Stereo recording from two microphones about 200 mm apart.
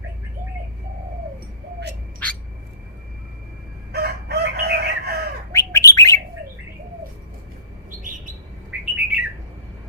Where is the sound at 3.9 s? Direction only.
50° right (ahead or behind).